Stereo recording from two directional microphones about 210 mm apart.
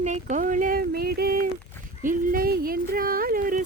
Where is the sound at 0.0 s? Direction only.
35° right (ahead or behind).